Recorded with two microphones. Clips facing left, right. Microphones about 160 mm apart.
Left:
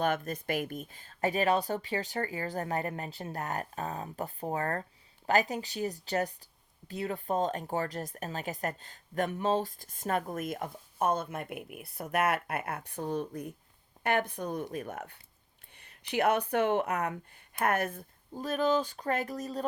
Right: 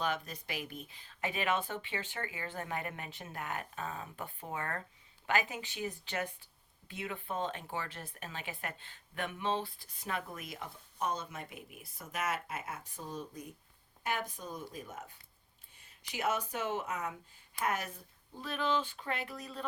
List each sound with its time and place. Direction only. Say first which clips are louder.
0.0 s speech: left 6 dB; 50° left (ahead or behind)